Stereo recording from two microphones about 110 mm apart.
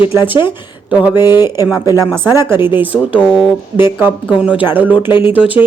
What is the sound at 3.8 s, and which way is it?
Speech, 20° right (ahead or behind).